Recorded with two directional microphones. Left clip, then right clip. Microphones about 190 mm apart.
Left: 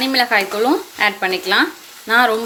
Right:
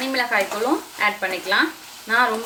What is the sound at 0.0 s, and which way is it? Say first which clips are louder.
Speech: left 5 dB; 40° left (ahead or behind).